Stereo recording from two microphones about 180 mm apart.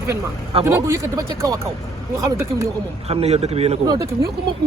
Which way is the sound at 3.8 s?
20° right (ahead or behind).